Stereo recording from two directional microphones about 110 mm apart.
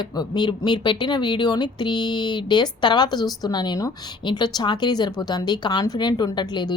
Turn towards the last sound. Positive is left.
turn(degrees=40)  # may be behind; listen again after turning